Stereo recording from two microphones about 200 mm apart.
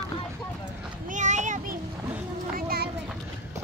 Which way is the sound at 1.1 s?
35° right (ahead or behind).